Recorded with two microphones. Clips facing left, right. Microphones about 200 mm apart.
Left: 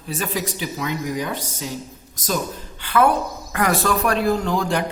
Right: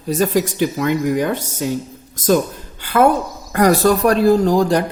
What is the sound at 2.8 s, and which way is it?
A woman's voice, 40° right (ahead or behind).